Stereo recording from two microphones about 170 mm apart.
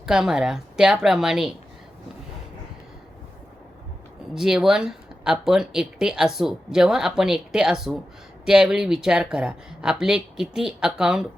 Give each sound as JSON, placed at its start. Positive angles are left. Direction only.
{"t": 0.0, "sound": "speech", "side_deg": -5}
{"t": 4.4, "sound": "speech", "side_deg": -5}